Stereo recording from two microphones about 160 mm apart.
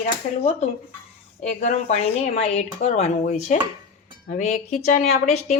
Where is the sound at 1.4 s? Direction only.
45° left (ahead or behind).